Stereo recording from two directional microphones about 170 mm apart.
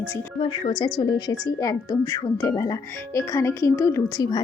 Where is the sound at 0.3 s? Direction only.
30° left (ahead or behind).